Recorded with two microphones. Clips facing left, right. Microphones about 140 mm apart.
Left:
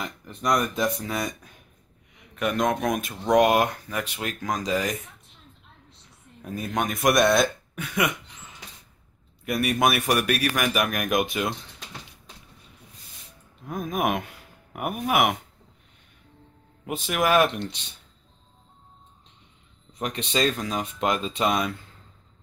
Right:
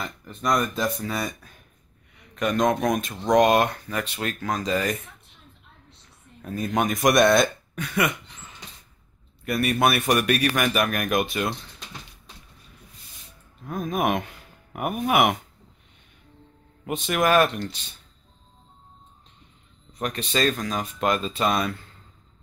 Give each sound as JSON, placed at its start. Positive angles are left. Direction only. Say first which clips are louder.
{"t": 0.0, "sound": "speech", "louder": "even", "side_deg": 20}
{"t": 2.1, "sound": "speech", "louder": "right 2 dB", "side_deg": 5}
{"t": 6.4, "sound": "speech", "louder": "right 3 dB", "side_deg": 10}
{"t": 6.7, "sound": "speech", "louder": "right 2 dB", "side_deg": 0}
{"t": 13.7, "sound": "speech", "louder": "right 1 dB", "side_deg": 10}
{"t": 16.8, "sound": "speech", "louder": "right 2 dB", "side_deg": 5}
{"t": 19.9, "sound": "speech", "louder": "right 1 dB", "side_deg": 25}